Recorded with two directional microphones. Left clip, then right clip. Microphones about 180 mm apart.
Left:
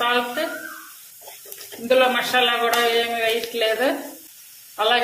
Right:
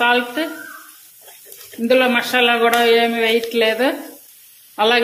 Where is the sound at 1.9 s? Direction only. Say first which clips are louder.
Right 2 dB; 45° right (ahead or behind).